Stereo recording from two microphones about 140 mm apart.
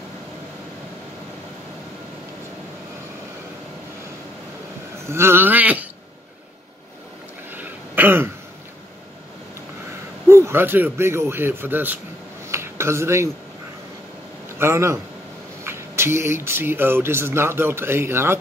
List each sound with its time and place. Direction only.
5.0 s speech: 20° right (ahead or behind)
7.5 s throat clearing: 15° right (ahead or behind)
10.2 s speech: 15° right (ahead or behind)
12.4 s a sound: 20° right (ahead or behind)
14.6 s a man's voice: 20° right (ahead or behind)